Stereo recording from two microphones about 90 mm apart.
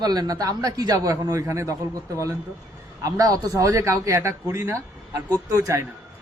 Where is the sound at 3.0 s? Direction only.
40° right (ahead or behind).